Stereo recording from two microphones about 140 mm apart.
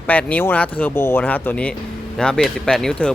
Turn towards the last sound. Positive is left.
turn(degrees=5)  # may be behind; listen again after turning